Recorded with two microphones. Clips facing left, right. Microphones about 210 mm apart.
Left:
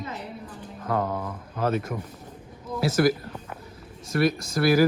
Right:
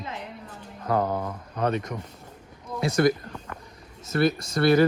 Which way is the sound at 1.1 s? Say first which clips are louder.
Right 2 dB; 30° right (ahead or behind).